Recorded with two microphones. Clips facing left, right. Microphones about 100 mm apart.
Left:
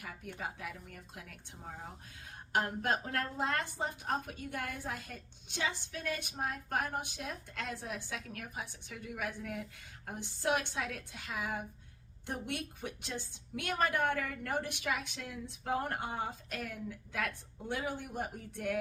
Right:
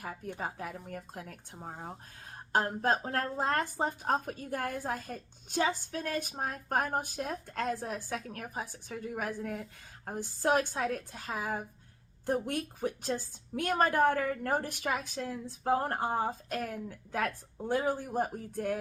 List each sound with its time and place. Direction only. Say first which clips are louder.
0.0 s a woman's voice: right 5 dB; 40° right (ahead or behind)